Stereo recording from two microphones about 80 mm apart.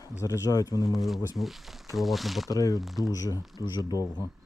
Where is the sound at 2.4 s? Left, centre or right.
Left.